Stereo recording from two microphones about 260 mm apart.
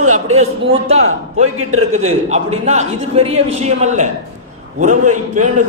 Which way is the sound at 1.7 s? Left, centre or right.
Right.